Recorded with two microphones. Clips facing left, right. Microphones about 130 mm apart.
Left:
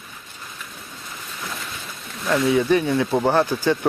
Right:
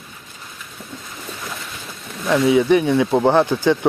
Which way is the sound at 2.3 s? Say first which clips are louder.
Right 4 dB; 15° right (ahead or behind).